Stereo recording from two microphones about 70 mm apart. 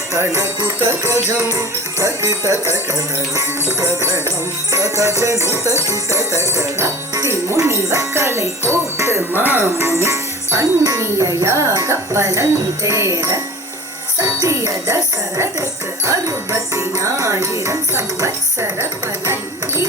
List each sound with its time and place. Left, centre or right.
0.1 s jingle bell: right
18.8 s music: right